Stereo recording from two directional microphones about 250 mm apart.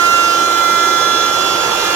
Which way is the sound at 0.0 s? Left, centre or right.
Centre.